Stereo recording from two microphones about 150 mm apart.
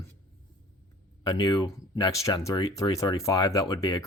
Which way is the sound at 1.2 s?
25° left (ahead or behind).